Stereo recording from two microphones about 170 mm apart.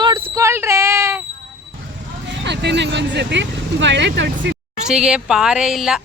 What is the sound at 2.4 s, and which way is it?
Speech, 90° right.